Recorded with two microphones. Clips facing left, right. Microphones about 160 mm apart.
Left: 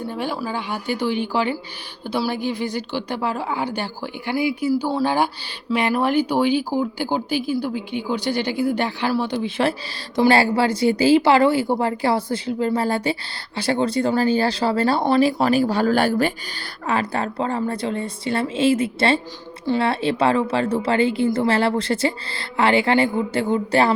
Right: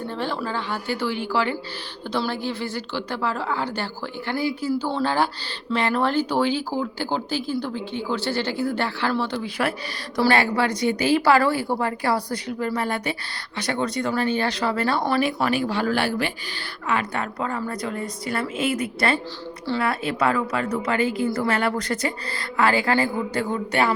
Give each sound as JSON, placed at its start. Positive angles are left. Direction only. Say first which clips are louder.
{"t": 0.1, "sound": "a woman's voice", "louder": "left 1 dB", "side_deg": 10}